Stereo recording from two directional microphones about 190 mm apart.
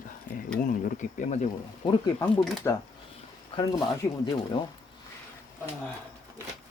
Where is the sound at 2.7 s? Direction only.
15° left (ahead or behind).